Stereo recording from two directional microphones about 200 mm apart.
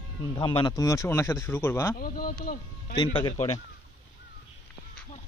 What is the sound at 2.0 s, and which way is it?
Speech, 45° left (ahead or behind).